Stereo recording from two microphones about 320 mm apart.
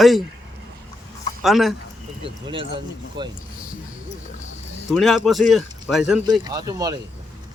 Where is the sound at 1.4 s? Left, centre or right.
Centre.